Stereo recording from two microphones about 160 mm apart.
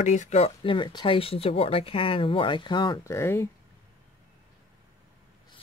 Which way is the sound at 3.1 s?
15° left (ahead or behind).